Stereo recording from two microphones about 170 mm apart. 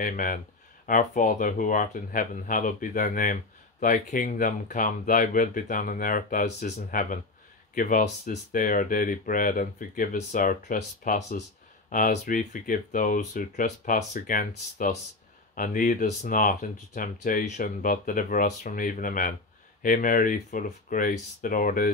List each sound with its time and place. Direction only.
0.0 s speech: 55° left (ahead or behind)
15.5 s speech: 50° left (ahead or behind)